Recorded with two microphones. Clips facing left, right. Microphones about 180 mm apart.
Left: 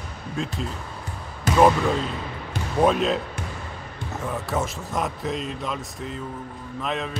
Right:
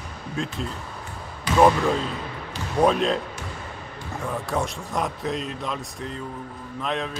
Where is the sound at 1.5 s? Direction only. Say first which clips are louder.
Left 1 dB; 45° left (ahead or behind).